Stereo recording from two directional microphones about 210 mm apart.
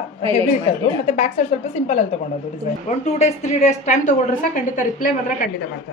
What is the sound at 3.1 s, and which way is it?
A woman's voice, 35° left (ahead or behind).